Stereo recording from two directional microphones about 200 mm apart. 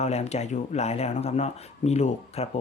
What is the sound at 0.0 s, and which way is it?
Speech, 35° left (ahead or behind).